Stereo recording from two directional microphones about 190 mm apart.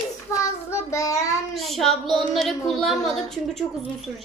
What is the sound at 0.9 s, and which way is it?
Child singing, 15° left (ahead or behind).